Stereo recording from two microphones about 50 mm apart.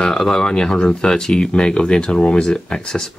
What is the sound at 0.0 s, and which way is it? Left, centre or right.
Speech, centre.